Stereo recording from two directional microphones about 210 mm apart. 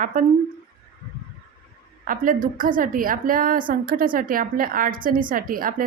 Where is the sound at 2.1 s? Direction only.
40° right (ahead or behind).